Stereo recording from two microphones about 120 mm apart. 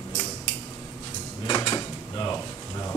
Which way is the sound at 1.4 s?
35° left (ahead or behind).